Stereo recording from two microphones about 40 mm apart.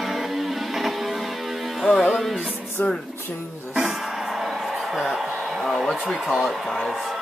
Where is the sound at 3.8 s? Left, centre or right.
Centre.